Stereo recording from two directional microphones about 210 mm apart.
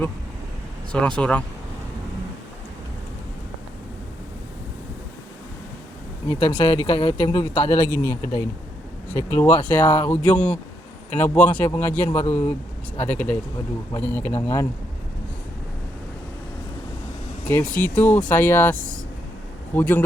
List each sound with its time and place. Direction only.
0.9 s speech: 5° left (ahead or behind)
6.2 s speech: 20° left (ahead or behind)
17.4 s speech: 5° left (ahead or behind)